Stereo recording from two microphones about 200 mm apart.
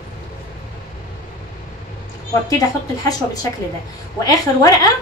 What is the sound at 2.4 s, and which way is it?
A woman's voice, 15° left (ahead or behind).